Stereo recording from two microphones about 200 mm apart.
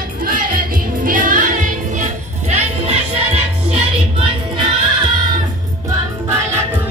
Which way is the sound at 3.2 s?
30° right (ahead or behind).